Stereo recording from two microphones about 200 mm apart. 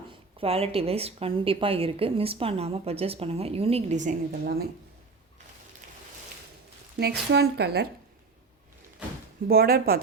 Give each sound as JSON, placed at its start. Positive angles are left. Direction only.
{"t": 0.3, "sound": "a woman's voice", "side_deg": -30}
{"t": 7.0, "sound": "a woman's voice", "side_deg": -55}
{"t": 9.5, "sound": "speech", "side_deg": -50}